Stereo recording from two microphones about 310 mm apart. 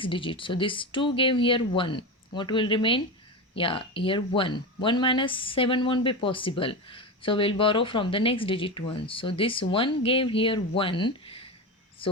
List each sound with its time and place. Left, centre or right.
0.0 s speech: centre